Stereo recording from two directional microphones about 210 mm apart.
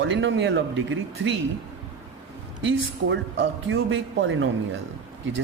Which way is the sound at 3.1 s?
65° right (ahead or behind).